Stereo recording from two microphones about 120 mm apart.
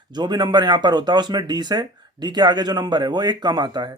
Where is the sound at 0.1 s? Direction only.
35° right (ahead or behind).